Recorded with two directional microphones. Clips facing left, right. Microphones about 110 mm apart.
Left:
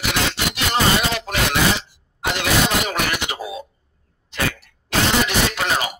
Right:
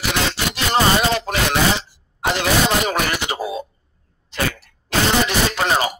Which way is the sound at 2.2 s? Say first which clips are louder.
Right 2 dB; 35° right (ahead or behind).